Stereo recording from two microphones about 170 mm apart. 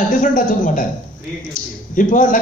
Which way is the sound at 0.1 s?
50° left (ahead or behind).